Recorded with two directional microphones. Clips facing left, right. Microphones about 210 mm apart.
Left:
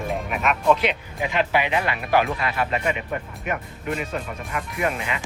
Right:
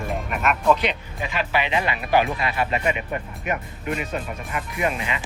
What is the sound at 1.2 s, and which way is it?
Speech, 20° left (ahead or behind).